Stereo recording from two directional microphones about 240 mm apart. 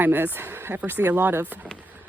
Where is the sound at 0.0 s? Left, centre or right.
Centre.